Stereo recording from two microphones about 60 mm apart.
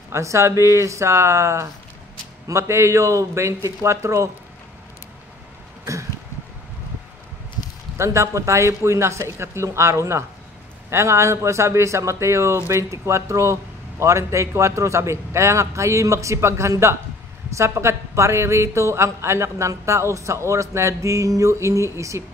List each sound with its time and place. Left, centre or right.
0.1 s a man's voice: right
8.0 s a man's voice: right